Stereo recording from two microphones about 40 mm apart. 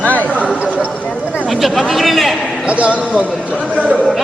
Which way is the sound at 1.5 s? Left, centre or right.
Centre.